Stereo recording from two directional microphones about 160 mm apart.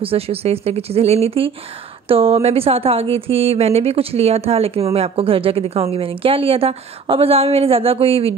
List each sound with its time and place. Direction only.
0.0 s a woman's voice: 35° right (ahead or behind)